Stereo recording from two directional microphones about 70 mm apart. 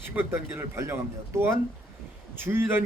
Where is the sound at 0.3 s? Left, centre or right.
Right.